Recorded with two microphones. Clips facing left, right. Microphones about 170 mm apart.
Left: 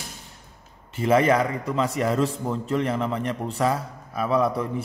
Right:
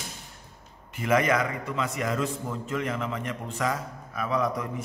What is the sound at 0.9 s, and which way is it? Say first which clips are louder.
A man's voice: left 5 dB; 30° left (ahead or behind).